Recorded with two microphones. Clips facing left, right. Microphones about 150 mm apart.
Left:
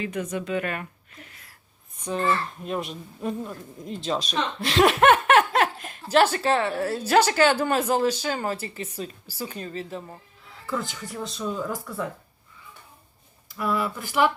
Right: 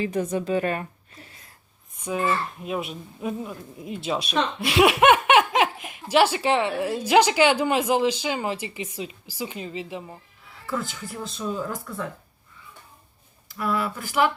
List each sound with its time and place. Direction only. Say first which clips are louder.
0.0 s a woman's voice: right 4 dB; 30° right (ahead or behind)
2.0 s speech: even; 10° right (ahead or behind)
10.7 s speech: even; centre (ahead or behind)
13.5 s speech: even; centre (ahead or behind)